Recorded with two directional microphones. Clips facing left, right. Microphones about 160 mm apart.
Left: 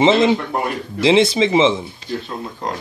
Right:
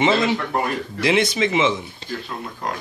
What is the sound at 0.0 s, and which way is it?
Speech, 25° left (ahead or behind).